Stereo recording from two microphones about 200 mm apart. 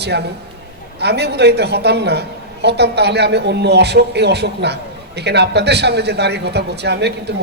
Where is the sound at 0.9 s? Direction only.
55° right (ahead or behind).